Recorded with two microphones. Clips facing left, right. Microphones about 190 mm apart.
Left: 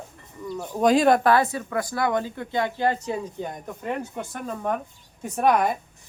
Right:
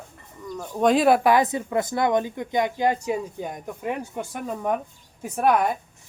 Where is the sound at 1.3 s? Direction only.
15° right (ahead or behind).